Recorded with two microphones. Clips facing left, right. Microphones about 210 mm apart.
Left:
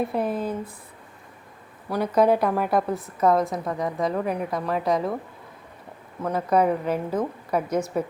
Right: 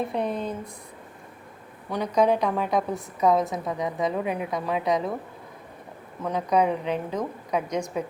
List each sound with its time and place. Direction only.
0.0 s a woman's voice: 5° left (ahead or behind)
1.9 s a woman's voice: 5° left (ahead or behind)
6.2 s a woman's voice: 5° left (ahead or behind)